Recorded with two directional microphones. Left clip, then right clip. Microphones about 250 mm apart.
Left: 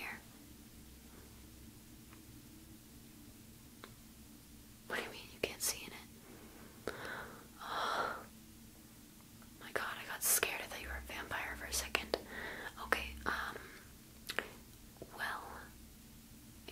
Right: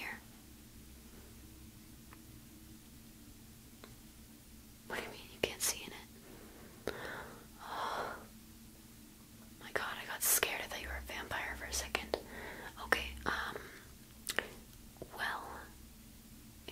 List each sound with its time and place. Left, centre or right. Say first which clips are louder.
4.8 s whispering: left 1 dB; centre
7.7 s gasp: left 2 dB; centre
9.6 s whispering: right 1 dB; right
14.3 s squish: right 3 dB; right
15.1 s whispering: right 2 dB; right